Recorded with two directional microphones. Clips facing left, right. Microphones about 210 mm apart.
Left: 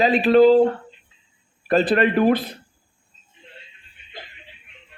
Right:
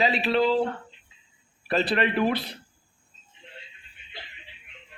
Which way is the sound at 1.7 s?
50° left (ahead or behind).